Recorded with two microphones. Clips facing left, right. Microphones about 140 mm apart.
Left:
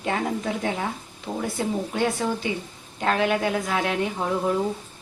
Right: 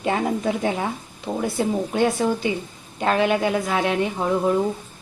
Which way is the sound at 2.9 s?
10° right (ahead or behind).